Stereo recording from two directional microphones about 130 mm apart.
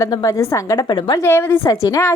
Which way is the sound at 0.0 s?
25° left (ahead or behind).